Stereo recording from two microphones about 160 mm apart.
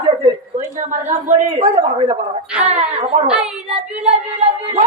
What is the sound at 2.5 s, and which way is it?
Speech, 10° right (ahead or behind).